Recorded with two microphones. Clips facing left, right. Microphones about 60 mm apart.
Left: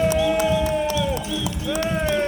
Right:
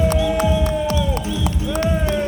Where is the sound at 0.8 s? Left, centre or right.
Right.